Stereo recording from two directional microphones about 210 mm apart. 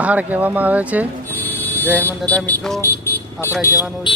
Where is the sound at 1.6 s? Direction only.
10° left (ahead or behind).